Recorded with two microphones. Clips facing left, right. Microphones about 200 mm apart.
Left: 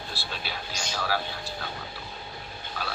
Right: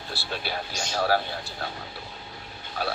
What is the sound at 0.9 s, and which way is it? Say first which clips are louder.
Speech: right 6 dB; 50° right (ahead or behind).